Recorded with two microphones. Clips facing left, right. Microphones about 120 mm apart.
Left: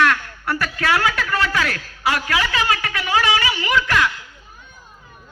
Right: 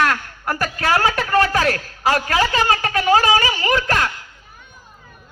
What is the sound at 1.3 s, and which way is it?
A man's voice, 40° right (ahead or behind).